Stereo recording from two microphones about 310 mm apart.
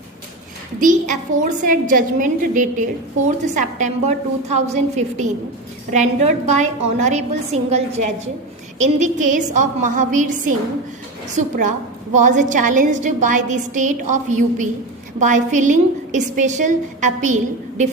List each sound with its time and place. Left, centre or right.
0.8 s a woman's voice: right